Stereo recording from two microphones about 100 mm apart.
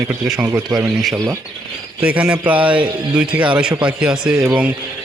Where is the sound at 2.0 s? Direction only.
15° right (ahead or behind).